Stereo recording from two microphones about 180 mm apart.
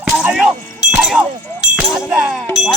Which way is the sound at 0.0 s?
5° right (ahead or behind).